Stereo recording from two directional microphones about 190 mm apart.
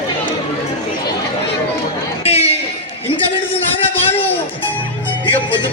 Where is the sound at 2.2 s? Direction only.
35° left (ahead or behind).